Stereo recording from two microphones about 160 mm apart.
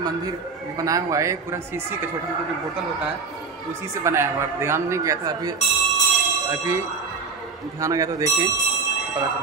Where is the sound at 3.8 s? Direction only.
15° right (ahead or behind).